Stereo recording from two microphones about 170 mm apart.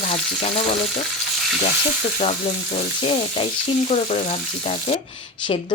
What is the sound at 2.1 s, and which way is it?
A woman's voice, 35° left (ahead or behind).